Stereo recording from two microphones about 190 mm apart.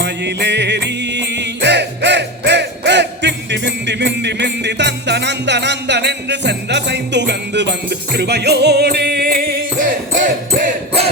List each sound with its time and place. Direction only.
0.0 s music: 65° right (ahead or behind)